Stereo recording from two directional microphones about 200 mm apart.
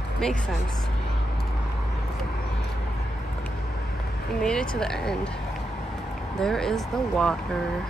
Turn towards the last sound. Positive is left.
turn(degrees=5)  # may be behind; listen again after turning